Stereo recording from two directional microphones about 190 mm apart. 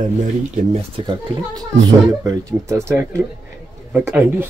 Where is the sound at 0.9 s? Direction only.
25° right (ahead or behind).